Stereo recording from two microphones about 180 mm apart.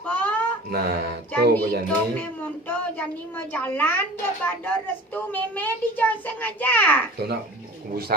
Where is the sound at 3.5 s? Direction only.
10° left (ahead or behind).